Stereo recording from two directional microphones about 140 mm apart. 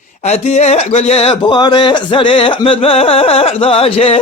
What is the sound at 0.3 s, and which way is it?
Speech, 55° left (ahead or behind).